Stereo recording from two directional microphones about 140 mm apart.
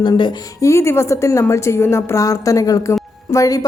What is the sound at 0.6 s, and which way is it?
A woman's voice, 20° left (ahead or behind).